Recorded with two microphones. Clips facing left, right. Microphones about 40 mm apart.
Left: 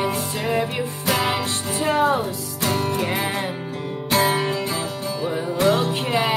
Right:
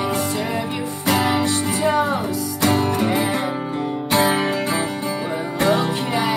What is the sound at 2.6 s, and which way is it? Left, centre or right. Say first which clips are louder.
Music: right 4 dB; right.